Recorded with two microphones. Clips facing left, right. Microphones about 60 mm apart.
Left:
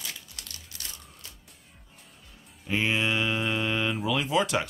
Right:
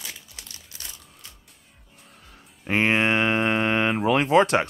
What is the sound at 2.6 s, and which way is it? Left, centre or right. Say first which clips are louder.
Speech: right 6 dB; right.